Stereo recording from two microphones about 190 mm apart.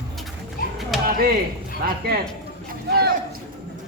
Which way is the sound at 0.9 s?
Centre (ahead or behind).